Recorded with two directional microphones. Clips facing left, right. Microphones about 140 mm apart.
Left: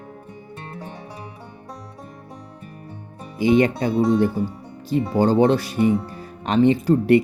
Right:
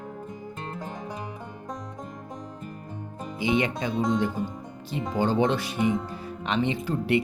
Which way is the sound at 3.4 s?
40° left (ahead or behind).